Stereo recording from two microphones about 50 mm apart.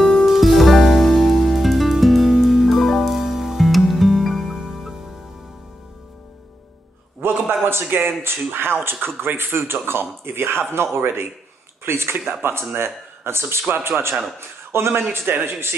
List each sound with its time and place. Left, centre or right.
0.0 s music: centre
7.2 s a sound: right
8.2 s speech: right